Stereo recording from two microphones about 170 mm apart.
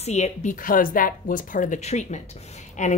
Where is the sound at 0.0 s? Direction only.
40° left (ahead or behind).